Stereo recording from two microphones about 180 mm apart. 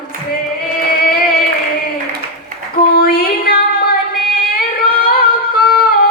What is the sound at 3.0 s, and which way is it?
Female singing, 55° left (ahead or behind).